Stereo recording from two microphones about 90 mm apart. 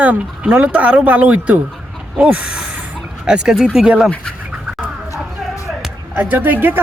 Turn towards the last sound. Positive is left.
turn(degrees=-20)  # may be behind; listen again after turning